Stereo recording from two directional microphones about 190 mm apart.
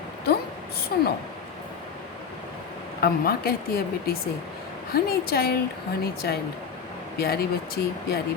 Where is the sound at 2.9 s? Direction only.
55° left (ahead or behind).